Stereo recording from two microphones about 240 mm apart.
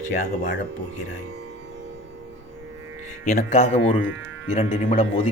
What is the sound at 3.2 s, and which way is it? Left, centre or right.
Speech, left.